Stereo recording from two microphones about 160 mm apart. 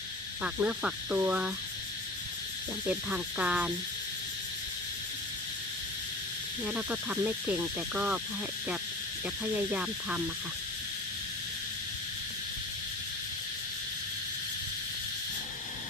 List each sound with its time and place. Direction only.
0.4 s speech: 5° right (ahead or behind)
2.8 s speech: 10° right (ahead or behind)
6.7 s speech: 10° right (ahead or behind)
9.4 s speech: 10° right (ahead or behind)